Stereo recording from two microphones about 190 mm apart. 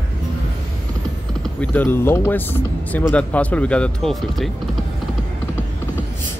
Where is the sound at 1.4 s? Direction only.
5° left (ahead or behind).